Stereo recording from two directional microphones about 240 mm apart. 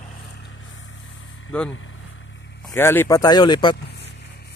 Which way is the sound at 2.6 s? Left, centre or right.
Centre.